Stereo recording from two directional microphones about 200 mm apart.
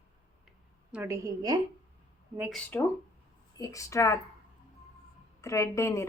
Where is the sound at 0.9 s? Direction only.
15° right (ahead or behind).